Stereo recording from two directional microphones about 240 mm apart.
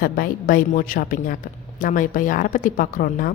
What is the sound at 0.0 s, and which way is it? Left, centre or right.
A woman's voice, left.